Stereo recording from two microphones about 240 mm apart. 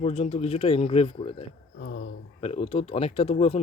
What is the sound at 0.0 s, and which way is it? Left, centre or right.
Speech, left.